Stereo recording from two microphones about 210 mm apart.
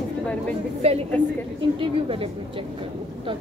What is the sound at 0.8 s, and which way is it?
A woman's voice, 30° right (ahead or behind).